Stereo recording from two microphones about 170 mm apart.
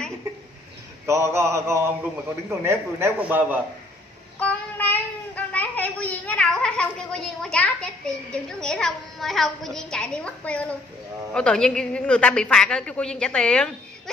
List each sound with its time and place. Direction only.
1.0 s a man's voice: 15° right (ahead or behind)
4.4 s a child's voice: 10° left (ahead or behind)